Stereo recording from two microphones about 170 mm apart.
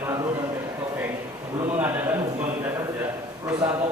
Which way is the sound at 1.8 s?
10° right (ahead or behind).